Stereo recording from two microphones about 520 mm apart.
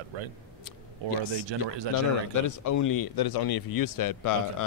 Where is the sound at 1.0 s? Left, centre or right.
Right.